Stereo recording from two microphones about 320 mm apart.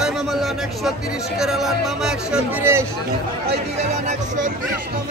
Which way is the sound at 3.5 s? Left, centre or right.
Right.